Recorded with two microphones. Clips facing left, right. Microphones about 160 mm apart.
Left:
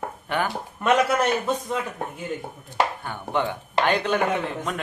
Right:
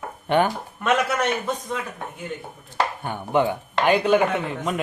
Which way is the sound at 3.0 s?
15° right (ahead or behind).